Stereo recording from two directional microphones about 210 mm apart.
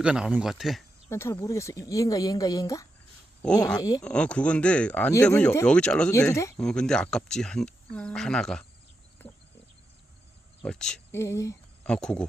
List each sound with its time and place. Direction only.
0.0 s speech: 5° right (ahead or behind)
1.1 s speech: 15° left (ahead or behind)
4.0 s speech: 5° left (ahead or behind)
10.6 s speech: 5° left (ahead or behind)